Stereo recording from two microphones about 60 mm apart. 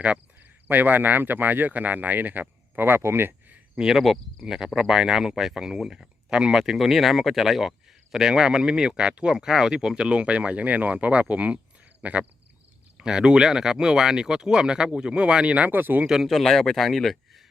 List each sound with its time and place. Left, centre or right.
0.7 s speech: right
3.8 s speech: centre
4.0 s speech: centre; by 16.0 s right
16.0 s speech: centre